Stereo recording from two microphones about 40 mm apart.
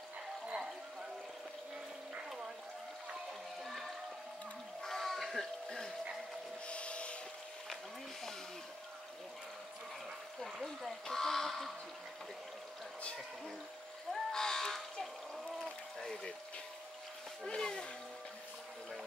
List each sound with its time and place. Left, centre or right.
4.8 s a sound: centre
6.7 s boat: left
10.4 s duck: centre
14.1 s a sound: centre
16.0 s water: centre
17.6 s music: centre